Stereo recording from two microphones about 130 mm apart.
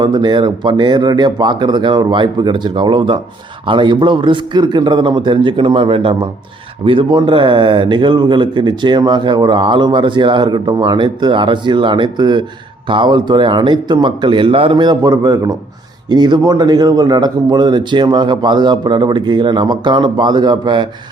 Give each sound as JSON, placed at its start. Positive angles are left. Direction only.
{"t": 0.0, "sound": "a man's voice", "side_deg": -35}